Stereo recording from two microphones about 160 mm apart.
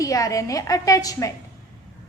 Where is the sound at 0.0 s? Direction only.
20° left (ahead or behind).